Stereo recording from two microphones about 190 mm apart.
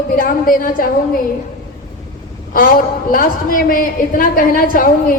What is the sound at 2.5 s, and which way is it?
A woman's voice, 45° left (ahead or behind).